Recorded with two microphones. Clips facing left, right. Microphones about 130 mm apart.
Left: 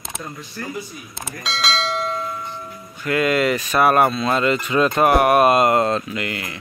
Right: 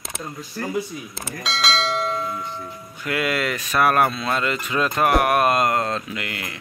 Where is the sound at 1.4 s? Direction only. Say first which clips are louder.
Even; centre (ahead or behind).